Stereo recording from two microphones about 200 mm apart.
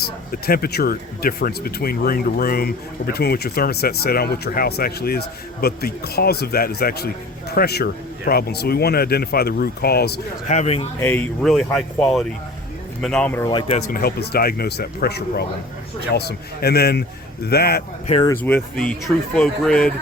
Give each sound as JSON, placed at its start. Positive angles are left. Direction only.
{"t": 0.0, "sound": "speech", "side_deg": 50}
{"t": 10.5, "sound": "speech", "side_deg": 35}
{"t": 11.0, "sound": "speech", "side_deg": 5}
{"t": 13.5, "sound": "speech", "side_deg": 30}
{"t": 14.0, "sound": "speech", "side_deg": 50}
{"t": 18.1, "sound": "speech", "side_deg": 20}
{"t": 18.4, "sound": "speech", "side_deg": 5}